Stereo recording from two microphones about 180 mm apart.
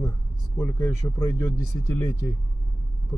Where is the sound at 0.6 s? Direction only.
15° left (ahead or behind).